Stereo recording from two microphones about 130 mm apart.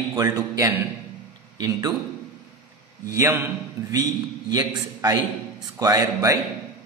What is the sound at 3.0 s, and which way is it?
A man's voice, 20° right (ahead or behind).